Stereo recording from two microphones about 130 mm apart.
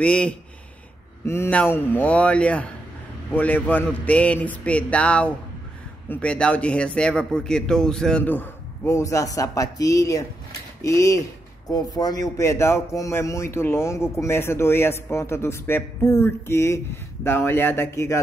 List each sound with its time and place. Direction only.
0.0 s a man's voice: 10° left (ahead or behind)
1.2 s a man's voice: 20° left (ahead or behind)